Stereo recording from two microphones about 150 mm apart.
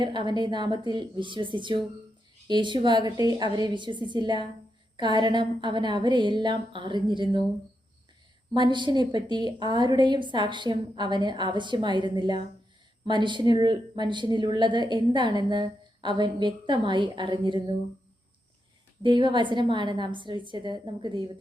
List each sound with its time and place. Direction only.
0.0 s a woman's voice: 30° right (ahead or behind)
8.5 s a woman's voice: 30° right (ahead or behind)
19.0 s a woman's voice: 30° right (ahead or behind)